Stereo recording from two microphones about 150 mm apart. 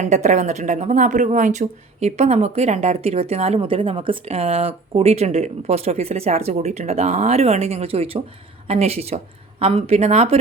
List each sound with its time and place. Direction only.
0.0 s speech: 50° right (ahead or behind)